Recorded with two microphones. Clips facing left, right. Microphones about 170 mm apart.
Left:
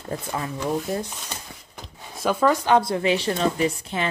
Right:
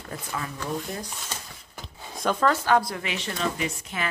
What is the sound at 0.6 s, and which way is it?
A woman's voice, 15° left (ahead or behind).